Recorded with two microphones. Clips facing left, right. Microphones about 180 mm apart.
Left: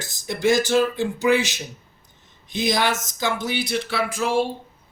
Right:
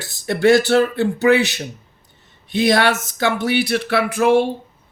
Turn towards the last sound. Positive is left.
turn(degrees=-60)  # may be behind; listen again after turning